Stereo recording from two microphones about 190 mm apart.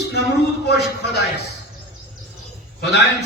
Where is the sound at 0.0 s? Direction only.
60° left (ahead or behind).